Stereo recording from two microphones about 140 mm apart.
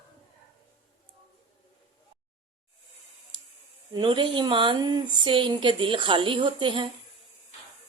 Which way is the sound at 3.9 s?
35° right (ahead or behind).